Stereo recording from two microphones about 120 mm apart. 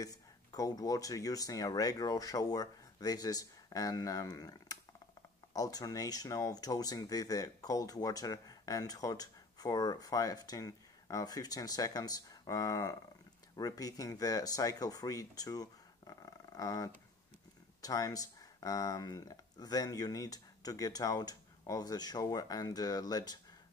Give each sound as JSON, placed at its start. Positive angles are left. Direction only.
{"t": 0.0, "sound": "speech", "side_deg": 30}